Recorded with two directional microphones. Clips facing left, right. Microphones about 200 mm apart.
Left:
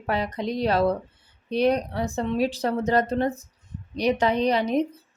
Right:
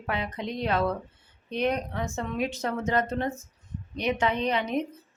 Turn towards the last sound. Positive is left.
turn(degrees=35)  # may be behind; listen again after turning